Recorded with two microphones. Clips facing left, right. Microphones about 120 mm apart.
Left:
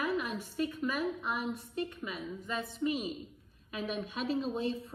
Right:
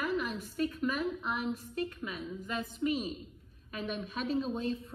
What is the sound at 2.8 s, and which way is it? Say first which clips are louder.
Speech: right 1 dB; centre (ahead or behind).